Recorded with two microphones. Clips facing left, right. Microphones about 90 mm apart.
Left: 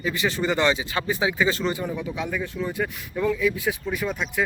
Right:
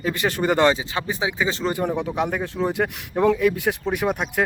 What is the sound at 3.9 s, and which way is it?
Speech, 55° right (ahead or behind).